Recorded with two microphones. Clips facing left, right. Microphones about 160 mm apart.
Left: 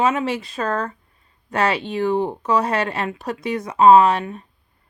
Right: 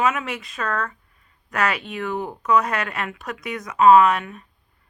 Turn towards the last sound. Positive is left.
turn(degrees=30)  # may be behind; listen again after turning